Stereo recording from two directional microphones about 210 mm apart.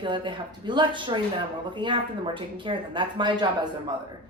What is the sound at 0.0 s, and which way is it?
Speech, 20° right (ahead or behind).